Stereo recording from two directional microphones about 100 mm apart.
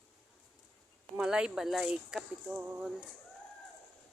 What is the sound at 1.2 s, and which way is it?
Speech, 5° right (ahead or behind).